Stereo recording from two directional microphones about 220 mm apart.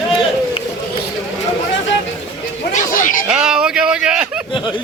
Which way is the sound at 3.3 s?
5° right (ahead or behind).